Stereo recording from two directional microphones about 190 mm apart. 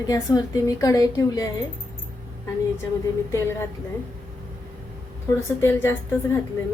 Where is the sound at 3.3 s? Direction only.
15° left (ahead or behind).